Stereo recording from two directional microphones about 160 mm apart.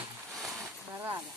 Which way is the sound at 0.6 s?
15° right (ahead or behind).